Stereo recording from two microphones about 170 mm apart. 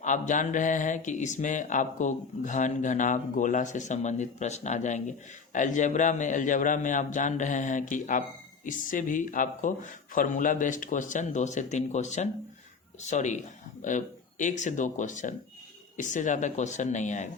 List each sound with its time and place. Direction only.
0.0 s speech: 45° left (ahead or behind)